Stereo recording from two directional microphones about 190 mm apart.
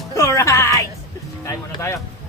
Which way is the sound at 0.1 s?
15° left (ahead or behind).